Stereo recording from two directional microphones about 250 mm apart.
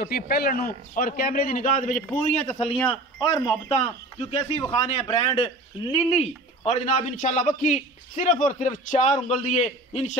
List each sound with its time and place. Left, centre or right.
0.0 s a man's voice: left
2.9 s a man's voice: left
3.7 s a man's voice: left